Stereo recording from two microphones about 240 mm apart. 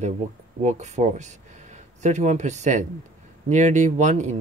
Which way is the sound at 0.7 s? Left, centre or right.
Right.